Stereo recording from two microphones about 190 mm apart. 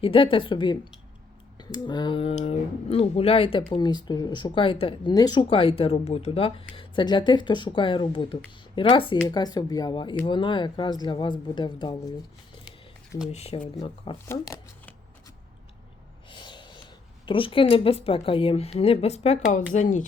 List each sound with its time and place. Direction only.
0.0 s speech: 25° left (ahead or behind)
13.3 s a woman's voice: 35° left (ahead or behind)
14.3 s speech: 10° left (ahead or behind)
16.3 s a sound: 25° left (ahead or behind)
17.2 s a woman's voice: 25° left (ahead or behind)